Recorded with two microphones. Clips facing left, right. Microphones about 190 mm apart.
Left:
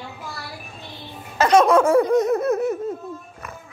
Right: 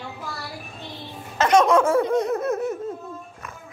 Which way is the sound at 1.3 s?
5° left (ahead or behind).